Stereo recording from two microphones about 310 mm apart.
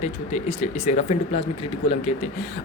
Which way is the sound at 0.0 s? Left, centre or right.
Left.